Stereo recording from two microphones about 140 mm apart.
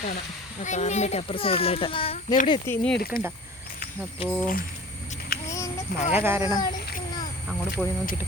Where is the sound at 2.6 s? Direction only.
10° left (ahead or behind).